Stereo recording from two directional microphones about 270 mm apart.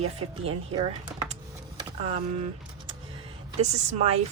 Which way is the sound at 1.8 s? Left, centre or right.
Right.